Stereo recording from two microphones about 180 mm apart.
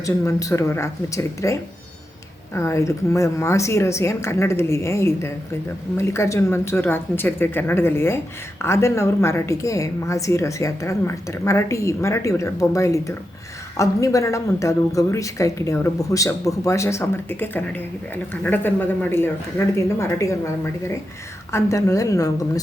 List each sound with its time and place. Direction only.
0.0 s a woman's voice: 20° left (ahead or behind)
2.6 s a woman's voice: 15° left (ahead or behind)
21.5 s a woman's voice: 15° left (ahead or behind)